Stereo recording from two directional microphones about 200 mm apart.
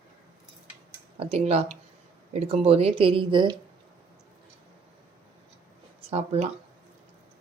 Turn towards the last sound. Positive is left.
turn(degrees=-30)  # may be behind; listen again after turning